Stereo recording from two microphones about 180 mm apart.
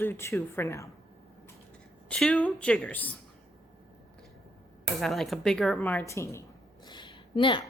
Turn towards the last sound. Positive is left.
turn(degrees=30)  # may be behind; listen again after turning